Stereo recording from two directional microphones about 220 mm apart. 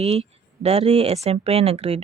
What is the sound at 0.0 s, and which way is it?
Speech, 25° right (ahead or behind).